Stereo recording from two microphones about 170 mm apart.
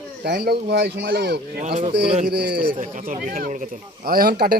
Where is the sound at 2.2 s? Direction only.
70° right (ahead or behind).